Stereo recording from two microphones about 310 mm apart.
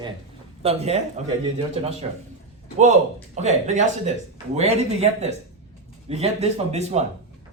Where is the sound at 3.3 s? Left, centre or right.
Right.